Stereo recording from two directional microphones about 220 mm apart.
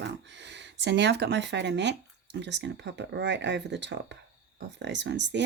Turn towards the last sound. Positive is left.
turn(degrees=-55)  # may be behind; listen again after turning